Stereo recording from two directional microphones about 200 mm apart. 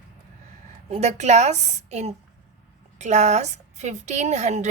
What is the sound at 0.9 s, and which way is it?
A woman's voice, 35° right (ahead or behind).